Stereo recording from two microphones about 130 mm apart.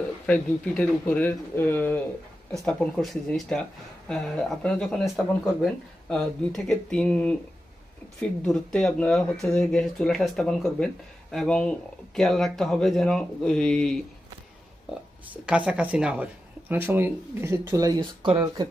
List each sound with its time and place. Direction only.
0.3 s speech: 10° left (ahead or behind)
2.5 s speech: 5° left (ahead or behind)
15.4 s speech: 10° right (ahead or behind); by 18.7 s 35° right (ahead or behind)